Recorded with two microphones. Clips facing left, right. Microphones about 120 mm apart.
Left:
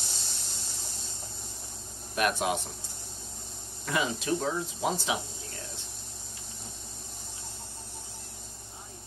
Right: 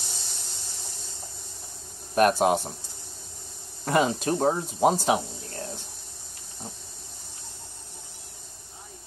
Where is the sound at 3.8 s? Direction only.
45° right (ahead or behind).